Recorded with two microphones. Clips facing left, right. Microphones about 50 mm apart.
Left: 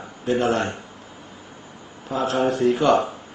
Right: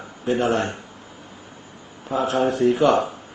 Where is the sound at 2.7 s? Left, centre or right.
Centre.